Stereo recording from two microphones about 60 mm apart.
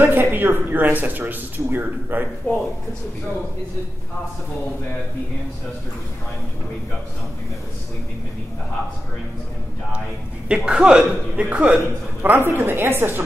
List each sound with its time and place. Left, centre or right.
0.0 s speech: right
10.5 s speech: centre; by 13.2 s right